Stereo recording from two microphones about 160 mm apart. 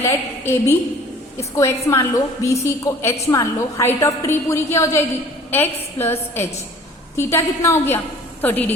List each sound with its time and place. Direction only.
0.0 s a woman's voice: 15° left (ahead or behind)